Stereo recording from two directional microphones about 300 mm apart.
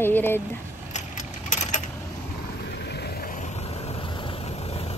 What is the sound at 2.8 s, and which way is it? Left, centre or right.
Vehicle, left.